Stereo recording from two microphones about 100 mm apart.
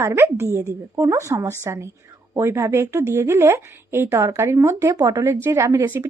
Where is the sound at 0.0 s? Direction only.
25° right (ahead or behind).